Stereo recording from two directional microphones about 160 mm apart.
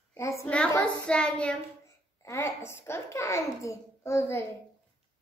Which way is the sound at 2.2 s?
20° left (ahead or behind).